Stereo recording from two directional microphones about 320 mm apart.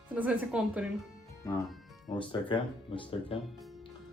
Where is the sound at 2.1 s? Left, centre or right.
Centre.